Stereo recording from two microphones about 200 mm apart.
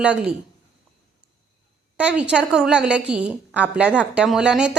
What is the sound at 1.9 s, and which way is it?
A woman's voice, 5° right (ahead or behind).